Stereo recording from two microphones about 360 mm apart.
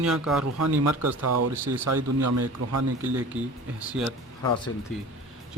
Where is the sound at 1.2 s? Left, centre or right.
Right.